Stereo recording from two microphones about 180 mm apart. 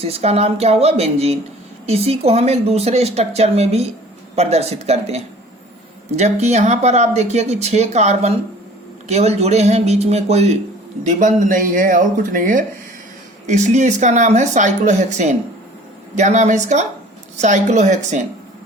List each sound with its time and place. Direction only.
0.0 s speech: 35° right (ahead or behind)